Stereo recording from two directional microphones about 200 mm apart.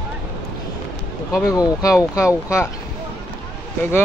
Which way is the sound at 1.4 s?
15° left (ahead or behind).